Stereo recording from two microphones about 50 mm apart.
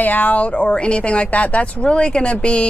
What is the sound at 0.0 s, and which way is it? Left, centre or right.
A woman's voice, left.